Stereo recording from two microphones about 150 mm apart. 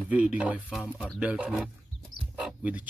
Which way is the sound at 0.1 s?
10° right (ahead or behind).